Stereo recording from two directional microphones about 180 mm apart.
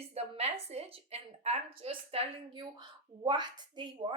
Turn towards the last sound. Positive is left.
turn(degrees=-25)  # may be behind; listen again after turning